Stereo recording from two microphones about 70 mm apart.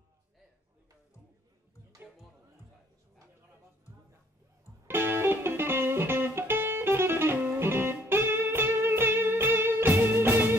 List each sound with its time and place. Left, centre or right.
4.8 s music: right